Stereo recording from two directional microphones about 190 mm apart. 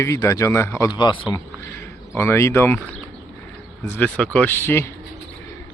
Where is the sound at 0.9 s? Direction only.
25° left (ahead or behind).